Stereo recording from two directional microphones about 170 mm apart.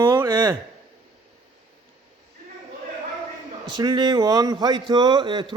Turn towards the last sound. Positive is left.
turn(degrees=-25)  # may be behind; listen again after turning